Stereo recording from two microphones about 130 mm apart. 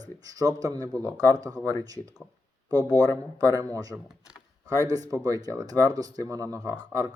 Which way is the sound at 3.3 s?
30° right (ahead or behind).